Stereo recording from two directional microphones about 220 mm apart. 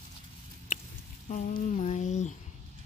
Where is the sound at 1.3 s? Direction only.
35° left (ahead or behind).